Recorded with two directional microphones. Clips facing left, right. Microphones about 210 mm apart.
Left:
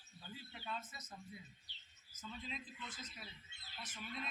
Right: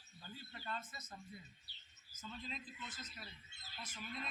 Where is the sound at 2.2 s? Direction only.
Centre (ahead or behind).